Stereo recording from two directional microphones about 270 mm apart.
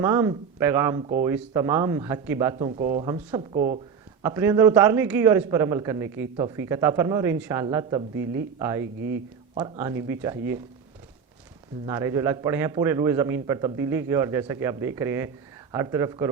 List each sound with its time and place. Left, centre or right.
0.0 s a man's voice: centre
8.1 s speech: right
8.5 s a man's voice: centre
8.8 s speech: right
9.6 s a man's voice: centre
11.9 s a man's voice: centre